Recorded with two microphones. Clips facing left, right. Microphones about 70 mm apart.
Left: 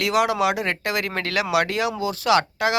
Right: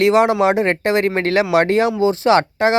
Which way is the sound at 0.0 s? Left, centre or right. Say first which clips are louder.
Right 7 dB; right.